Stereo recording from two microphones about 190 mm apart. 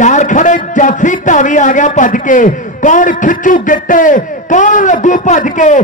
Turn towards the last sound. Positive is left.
turn(degrees=40)  # may be behind; listen again after turning